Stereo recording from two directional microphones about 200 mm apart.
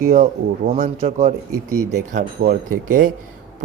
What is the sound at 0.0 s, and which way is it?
Speech, 40° right (ahead or behind).